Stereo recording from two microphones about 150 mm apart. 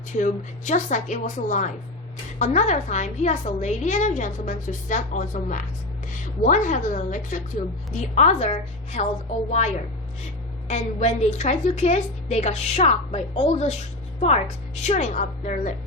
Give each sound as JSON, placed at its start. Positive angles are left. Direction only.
{"t": 0.2, "sound": "a woman's voice", "side_deg": 55}
{"t": 14.8, "sound": "a woman's voice", "side_deg": 50}